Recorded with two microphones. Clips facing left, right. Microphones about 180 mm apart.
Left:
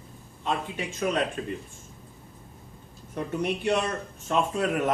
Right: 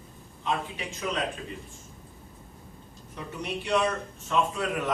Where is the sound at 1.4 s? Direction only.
45° left (ahead or behind).